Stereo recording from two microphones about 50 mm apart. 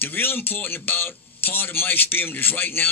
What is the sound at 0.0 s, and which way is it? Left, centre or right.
Speech, left.